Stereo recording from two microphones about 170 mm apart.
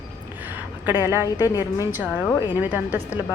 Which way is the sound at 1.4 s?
20° left (ahead or behind).